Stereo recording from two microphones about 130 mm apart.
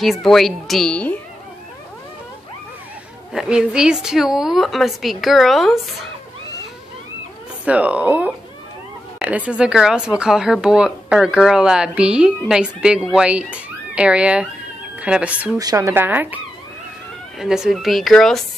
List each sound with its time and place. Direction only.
0.0 s a woman's voice: centre (ahead or behind)
3.3 s a woman's voice: 5° right (ahead or behind)
7.6 s speech: 10° right (ahead or behind)
15.5 s speech: 25° right (ahead or behind)
17.4 s a woman's voice: 5° right (ahead or behind)